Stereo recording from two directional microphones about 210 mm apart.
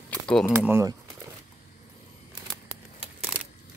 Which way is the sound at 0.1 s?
5° left (ahead or behind).